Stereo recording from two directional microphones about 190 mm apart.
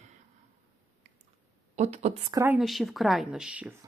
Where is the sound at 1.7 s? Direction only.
35° right (ahead or behind).